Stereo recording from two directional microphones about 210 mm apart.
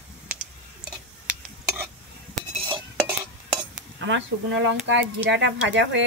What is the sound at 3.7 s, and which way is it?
Speech, 60° right (ahead or behind).